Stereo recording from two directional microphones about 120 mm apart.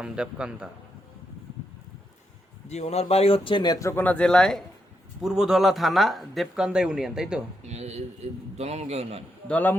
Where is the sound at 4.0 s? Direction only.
10° left (ahead or behind).